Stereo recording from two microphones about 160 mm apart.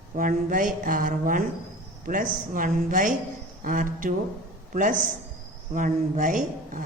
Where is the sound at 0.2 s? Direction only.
55° right (ahead or behind).